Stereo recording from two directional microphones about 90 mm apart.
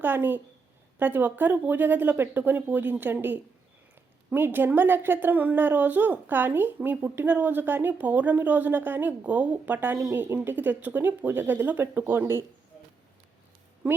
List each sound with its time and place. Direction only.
0.0 s a woman's voice: 20° right (ahead or behind)
13.8 s speech: 15° right (ahead or behind)